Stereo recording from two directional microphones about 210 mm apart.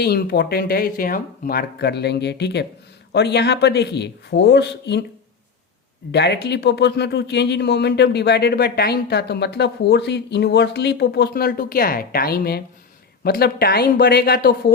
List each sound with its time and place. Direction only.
0.0 s speech: 50° left (ahead or behind)
6.1 s speech: 55° left (ahead or behind)